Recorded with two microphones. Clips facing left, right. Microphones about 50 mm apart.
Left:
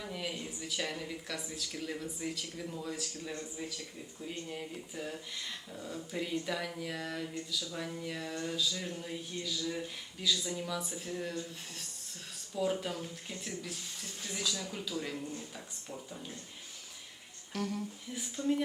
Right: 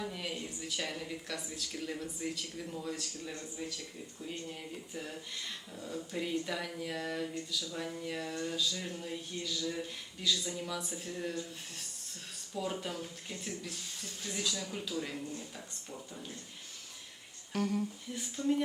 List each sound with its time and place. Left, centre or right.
0.0 s a woman's voice: centre
12.5 s a woman's voice: centre
17.5 s a woman's voice: centre